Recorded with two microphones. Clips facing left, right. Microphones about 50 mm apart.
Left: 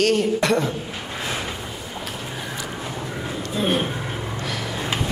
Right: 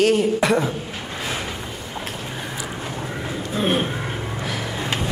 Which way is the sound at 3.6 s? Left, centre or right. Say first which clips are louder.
Right 1 dB; centre.